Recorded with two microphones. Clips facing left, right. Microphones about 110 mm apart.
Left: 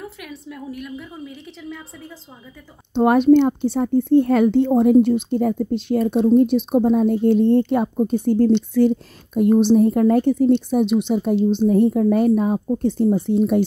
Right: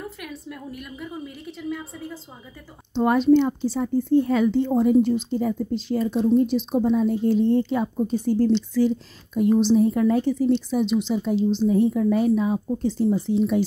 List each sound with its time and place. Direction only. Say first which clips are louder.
0.2 s a woman's voice: left 1 dB; centre (ahead or behind)
2.9 s speech: left 4 dB; 60° left (ahead or behind)